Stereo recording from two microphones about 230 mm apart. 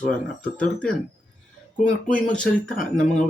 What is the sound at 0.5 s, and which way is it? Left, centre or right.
Speech, left.